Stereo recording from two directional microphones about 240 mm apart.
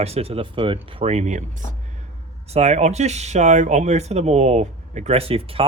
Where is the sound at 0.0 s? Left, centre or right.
Right.